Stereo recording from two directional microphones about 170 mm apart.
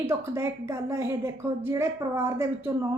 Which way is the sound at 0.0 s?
15° right (ahead or behind).